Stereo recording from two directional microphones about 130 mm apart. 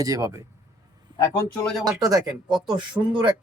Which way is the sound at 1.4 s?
5° left (ahead or behind).